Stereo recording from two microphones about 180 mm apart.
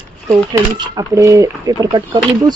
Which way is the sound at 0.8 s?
20° right (ahead or behind).